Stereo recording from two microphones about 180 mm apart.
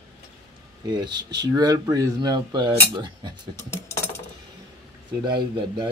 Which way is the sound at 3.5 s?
15° left (ahead or behind).